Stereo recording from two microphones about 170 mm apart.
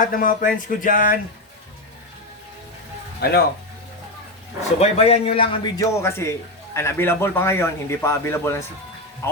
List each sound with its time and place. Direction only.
0.0 s speech: 55° left (ahead or behind)
4.8 s a man's voice: 35° left (ahead or behind); by 9.4 s 15° left (ahead or behind)